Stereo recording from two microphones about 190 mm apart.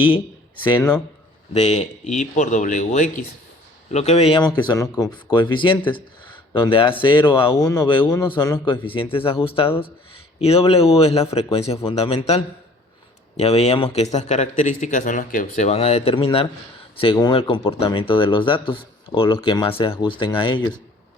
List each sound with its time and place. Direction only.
0.8 s a man's voice: 10° left (ahead or behind)
1.5 s a man's voice: 35° left (ahead or behind); by 8.6 s 15° left (ahead or behind)
8.6 s speech: 25° left (ahead or behind)